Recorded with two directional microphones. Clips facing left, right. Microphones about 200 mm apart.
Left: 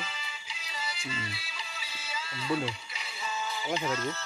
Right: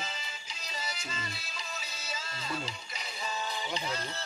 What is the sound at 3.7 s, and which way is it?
Speech, 35° right (ahead or behind).